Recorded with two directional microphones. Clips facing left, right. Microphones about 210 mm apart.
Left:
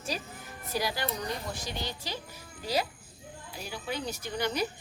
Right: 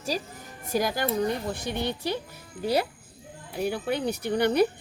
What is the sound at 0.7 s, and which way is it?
Speech, 50° right (ahead or behind).